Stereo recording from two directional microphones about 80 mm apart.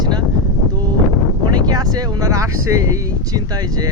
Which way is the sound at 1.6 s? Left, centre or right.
Right.